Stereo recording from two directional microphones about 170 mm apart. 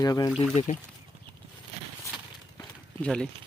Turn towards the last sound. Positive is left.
turn(degrees=5)  # may be behind; listen again after turning